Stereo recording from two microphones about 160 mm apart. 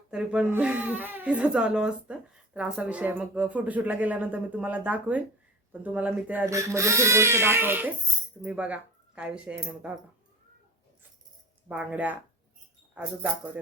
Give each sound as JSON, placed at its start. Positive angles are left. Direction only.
{"t": 0.1, "sound": "speech", "side_deg": -5}
{"t": 11.7, "sound": "speech", "side_deg": -10}